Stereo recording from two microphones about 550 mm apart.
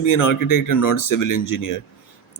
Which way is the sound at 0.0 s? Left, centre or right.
Left.